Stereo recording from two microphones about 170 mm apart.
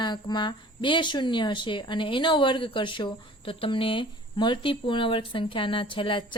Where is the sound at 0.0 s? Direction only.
25° left (ahead or behind).